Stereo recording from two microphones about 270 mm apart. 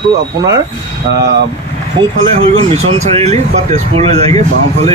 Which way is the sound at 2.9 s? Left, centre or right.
Right.